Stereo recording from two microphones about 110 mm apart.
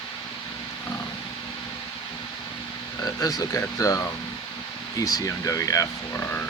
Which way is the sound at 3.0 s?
35° left (ahead or behind).